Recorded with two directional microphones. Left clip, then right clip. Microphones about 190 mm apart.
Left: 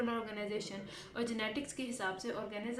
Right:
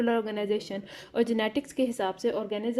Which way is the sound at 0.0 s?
50° right (ahead or behind).